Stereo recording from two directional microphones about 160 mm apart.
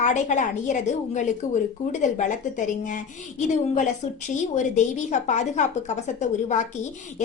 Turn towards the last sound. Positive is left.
turn(degrees=50)  # may be behind; listen again after turning